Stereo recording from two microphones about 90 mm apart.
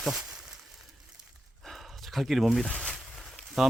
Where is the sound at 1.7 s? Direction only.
Centre (ahead or behind).